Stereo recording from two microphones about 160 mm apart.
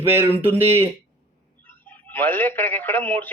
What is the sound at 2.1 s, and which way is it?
Speech, 10° left (ahead or behind).